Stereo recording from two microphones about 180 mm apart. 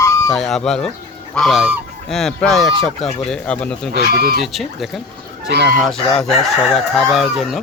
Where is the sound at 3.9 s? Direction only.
60° right (ahead or behind).